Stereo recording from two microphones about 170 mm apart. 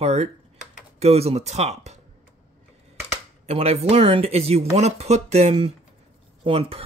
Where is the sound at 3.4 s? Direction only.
40° right (ahead or behind).